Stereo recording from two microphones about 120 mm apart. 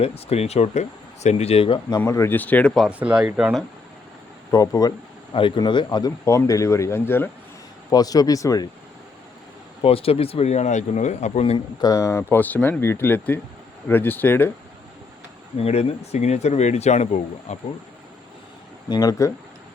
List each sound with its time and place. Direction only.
0.0 s speech: 55° left (ahead or behind)
2.0 s speech: 25° left (ahead or behind); by 2.9 s 5° left (ahead or behind)
3.0 s speech: 10° right (ahead or behind)
4.5 s speech: 30° left (ahead or behind)
5.3 s speech: 45° left (ahead or behind); by 7.3 s 20° left (ahead or behind)
7.9 s speech: 30° left (ahead or behind)
9.8 s speech: 50° left (ahead or behind)
11.5 s speech: 35° left (ahead or behind); by 14.5 s 15° left (ahead or behind)
15.5 s speech: 60° left (ahead or behind)
18.9 s speech: 30° left (ahead or behind)